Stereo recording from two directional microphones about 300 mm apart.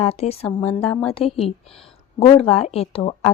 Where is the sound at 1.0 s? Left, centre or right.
Centre.